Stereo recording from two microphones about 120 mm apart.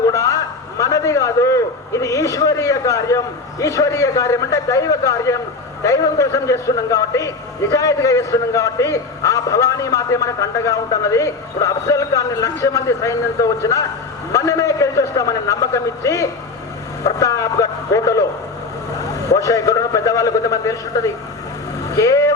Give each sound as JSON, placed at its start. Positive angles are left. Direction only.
{"t": 0.1, "sound": "a man's voice", "side_deg": 25}
{"t": 19.3, "sound": "a man's voice", "side_deg": 30}